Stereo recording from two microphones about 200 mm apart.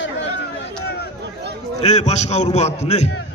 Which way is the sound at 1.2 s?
55° right (ahead or behind).